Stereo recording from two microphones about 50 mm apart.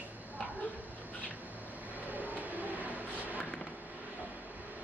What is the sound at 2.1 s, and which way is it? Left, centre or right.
Vehicle, right.